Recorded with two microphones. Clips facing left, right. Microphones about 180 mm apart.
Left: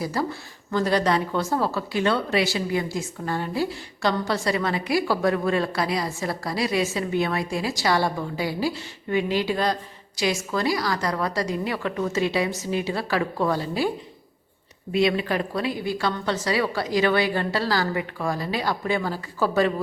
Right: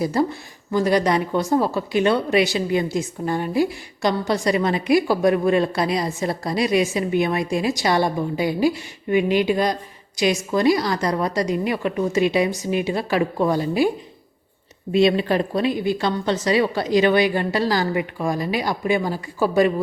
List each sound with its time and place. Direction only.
0.0 s speech: 20° right (ahead or behind)
14.9 s a woman's voice: 25° right (ahead or behind)